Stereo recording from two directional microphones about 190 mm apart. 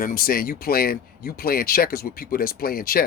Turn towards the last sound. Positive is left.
turn(degrees=50)  # may be behind; listen again after turning